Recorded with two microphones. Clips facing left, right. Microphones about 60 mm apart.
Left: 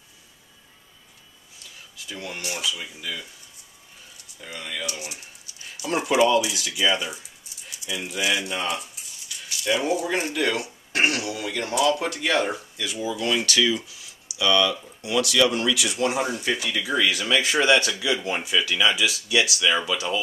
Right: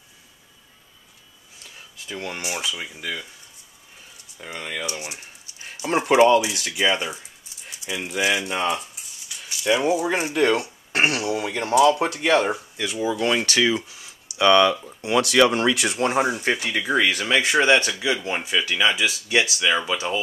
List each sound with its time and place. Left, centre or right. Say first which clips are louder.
2.0 s speech: right 3 dB; right
2.4 s speech: left 1 dB; right
3.0 s speech: right 3 dB; right
4.4 s speech: right 3 dB; right
9.5 s speech: right 3 dB; right
10.3 s speech: right 5 dB; right